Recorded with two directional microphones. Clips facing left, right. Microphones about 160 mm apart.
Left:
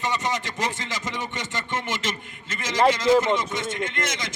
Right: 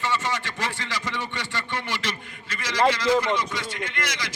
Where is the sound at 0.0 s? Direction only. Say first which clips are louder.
Left 1 dB; 20° left (ahead or behind).